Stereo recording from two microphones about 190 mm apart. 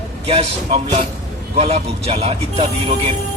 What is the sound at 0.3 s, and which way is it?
A man's voice, 30° right (ahead or behind).